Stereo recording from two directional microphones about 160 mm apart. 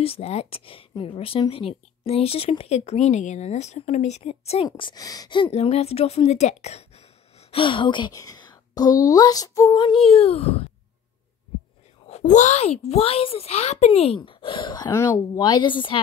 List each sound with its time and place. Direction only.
0.0 s speech: 40° left (ahead or behind)
4.6 s speech: 25° left (ahead or behind)
10.0 s speech: 40° left (ahead or behind)
12.1 s speech: 50° left (ahead or behind); by 14.9 s 30° left (ahead or behind)
14.9 s speech: 15° left (ahead or behind)
15.3 s a woman's voice: 25° left (ahead or behind)